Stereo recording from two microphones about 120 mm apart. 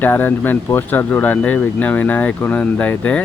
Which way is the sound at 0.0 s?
15° left (ahead or behind).